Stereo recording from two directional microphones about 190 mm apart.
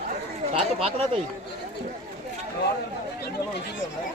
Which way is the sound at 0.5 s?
30° right (ahead or behind).